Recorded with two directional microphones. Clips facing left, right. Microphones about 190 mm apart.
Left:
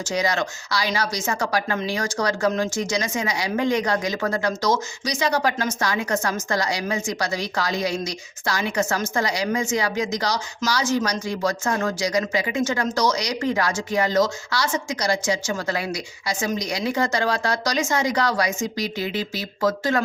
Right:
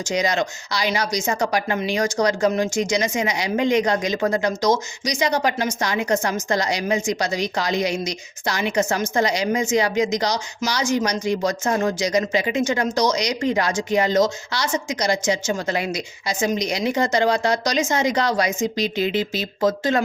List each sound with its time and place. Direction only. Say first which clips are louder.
0.0 s speech: right 2 dB; 20° right (ahead or behind)